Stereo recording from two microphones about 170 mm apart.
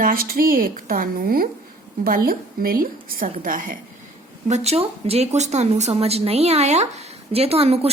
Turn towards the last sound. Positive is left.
turn(degrees=-35)  # may be behind; listen again after turning